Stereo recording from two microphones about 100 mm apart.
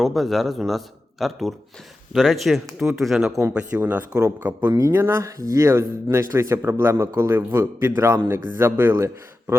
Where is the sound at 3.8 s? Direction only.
15° right (ahead or behind).